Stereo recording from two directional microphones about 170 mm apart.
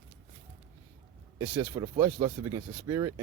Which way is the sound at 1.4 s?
10° right (ahead or behind).